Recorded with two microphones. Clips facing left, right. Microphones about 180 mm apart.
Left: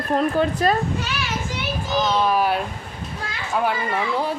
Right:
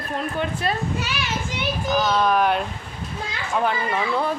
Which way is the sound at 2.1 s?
5° left (ahead or behind).